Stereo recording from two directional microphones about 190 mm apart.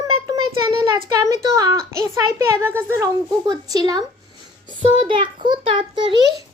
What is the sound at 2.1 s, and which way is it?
A woman's voice, 10° right (ahead or behind).